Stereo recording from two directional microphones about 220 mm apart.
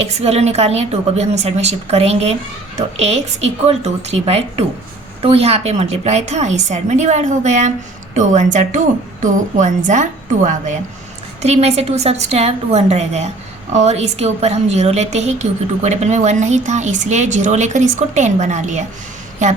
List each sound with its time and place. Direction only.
0.0 s a woman's voice: 30° right (ahead or behind)